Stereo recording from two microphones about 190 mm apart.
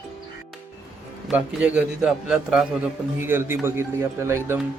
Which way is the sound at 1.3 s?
5° right (ahead or behind).